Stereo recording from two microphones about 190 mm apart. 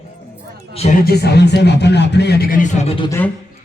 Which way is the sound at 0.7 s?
40° left (ahead or behind).